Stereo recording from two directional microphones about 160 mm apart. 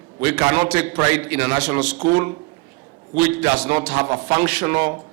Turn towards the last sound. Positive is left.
turn(degrees=-15)  # may be behind; listen again after turning